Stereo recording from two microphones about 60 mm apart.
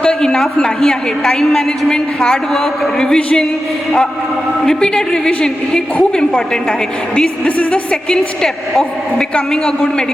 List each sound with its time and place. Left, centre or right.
0.0 s a woman's voice: centre
4.6 s a woman's voice: centre
8.1 s a woman's voice: centre